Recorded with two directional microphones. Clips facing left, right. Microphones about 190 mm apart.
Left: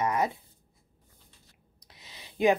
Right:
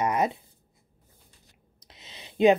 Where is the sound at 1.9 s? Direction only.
20° right (ahead or behind).